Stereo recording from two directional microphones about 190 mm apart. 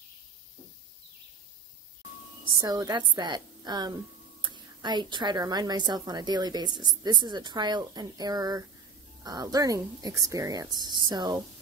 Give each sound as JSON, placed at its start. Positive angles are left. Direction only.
{"t": 2.6, "sound": "speech", "side_deg": -20}